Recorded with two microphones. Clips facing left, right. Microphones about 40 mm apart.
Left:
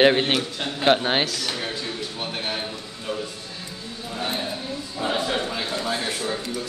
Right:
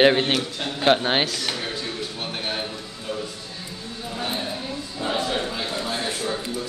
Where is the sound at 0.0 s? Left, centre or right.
Centre.